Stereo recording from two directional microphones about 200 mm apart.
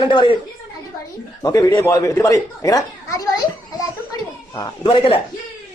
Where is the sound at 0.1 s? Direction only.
25° left (ahead or behind).